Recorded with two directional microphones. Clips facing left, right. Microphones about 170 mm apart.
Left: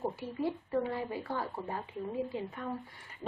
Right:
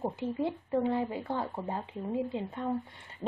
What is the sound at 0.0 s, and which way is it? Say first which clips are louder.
A woman's voice: right 2 dB; 20° right (ahead or behind).